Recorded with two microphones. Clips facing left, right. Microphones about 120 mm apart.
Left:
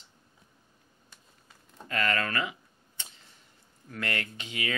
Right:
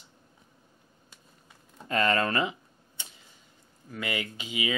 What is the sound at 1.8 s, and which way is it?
Speech, 25° right (ahead or behind).